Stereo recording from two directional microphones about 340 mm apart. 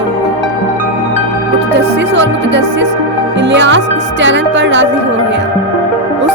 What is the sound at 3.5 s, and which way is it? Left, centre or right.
Music, right.